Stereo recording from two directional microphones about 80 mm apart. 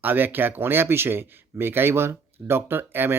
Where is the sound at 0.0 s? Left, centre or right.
Right.